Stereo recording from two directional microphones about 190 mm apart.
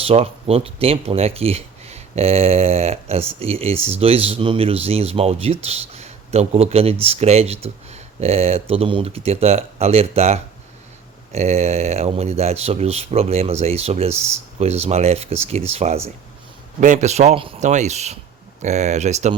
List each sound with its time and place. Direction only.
0.0 s speech: 30° right (ahead or behind)